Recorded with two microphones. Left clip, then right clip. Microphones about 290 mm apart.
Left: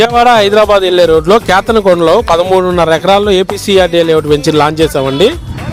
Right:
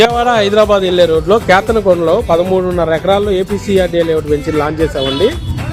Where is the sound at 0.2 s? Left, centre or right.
Left.